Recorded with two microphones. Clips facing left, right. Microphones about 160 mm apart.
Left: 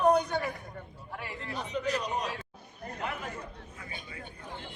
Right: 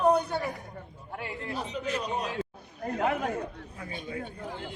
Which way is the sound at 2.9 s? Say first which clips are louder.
Right 9 dB; 70° right (ahead or behind).